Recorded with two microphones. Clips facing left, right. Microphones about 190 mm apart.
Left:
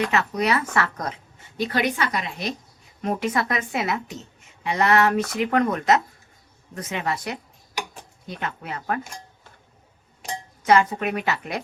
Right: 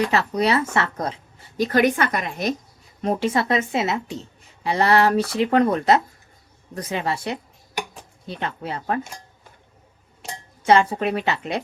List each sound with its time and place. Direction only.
0.1 s a woman's voice: 30° right (ahead or behind); by 2.6 s 45° right (ahead or behind)
3.0 s a woman's voice: 30° right (ahead or behind)
10.6 s a woman's voice: 30° right (ahead or behind)